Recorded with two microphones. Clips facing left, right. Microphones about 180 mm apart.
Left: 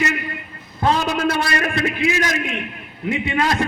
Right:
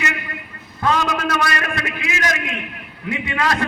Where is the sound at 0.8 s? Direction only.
30° left (ahead or behind).